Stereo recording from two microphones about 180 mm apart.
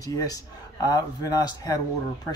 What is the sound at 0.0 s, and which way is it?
Speech, 20° left (ahead or behind).